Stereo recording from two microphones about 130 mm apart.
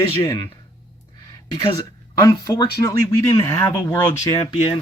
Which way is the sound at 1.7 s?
30° left (ahead or behind).